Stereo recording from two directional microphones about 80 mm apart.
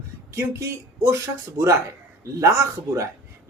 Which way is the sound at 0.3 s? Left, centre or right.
Right.